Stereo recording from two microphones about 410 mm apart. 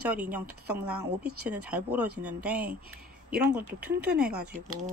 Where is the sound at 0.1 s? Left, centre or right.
Centre.